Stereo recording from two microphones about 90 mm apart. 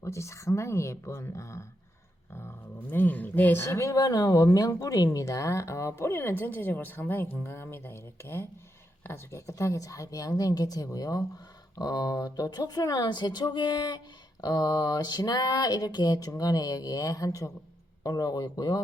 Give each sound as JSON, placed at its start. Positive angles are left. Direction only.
{"t": 0.0, "sound": "speech", "side_deg": 35}
{"t": 2.9, "sound": "speech", "side_deg": 20}